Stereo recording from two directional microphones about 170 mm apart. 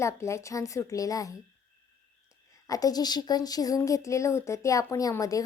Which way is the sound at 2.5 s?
20° left (ahead or behind).